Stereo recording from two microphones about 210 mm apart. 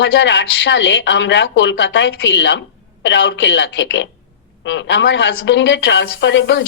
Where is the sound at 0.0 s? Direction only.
60° left (ahead or behind).